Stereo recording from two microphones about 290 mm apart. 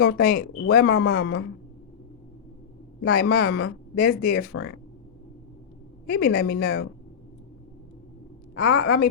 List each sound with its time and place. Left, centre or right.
0.0 s speech: left
3.0 s speech: left
6.1 s speech: left
8.5 s speech: left